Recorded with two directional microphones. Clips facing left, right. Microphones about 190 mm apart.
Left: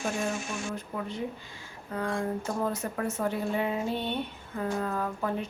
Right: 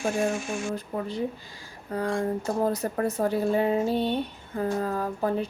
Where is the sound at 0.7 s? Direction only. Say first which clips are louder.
Right 4 dB; 35° right (ahead or behind).